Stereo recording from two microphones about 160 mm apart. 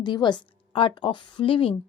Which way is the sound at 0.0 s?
25° left (ahead or behind).